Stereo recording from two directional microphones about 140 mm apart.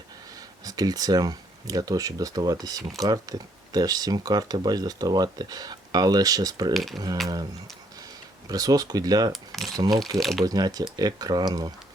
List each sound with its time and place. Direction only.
0.6 s speech: 25° right (ahead or behind)
6.7 s cutlery: centre (ahead or behind)
8.4 s speech: 25° right (ahead or behind)
9.3 s cutlery: centre (ahead or behind)
10.4 s speech: 30° right (ahead or behind)